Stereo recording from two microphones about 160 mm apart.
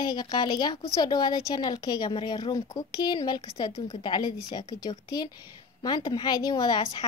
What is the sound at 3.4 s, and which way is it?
A woman's voice, 35° left (ahead or behind).